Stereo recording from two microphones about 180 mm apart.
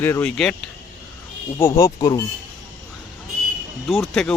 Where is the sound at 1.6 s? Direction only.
15° left (ahead or behind).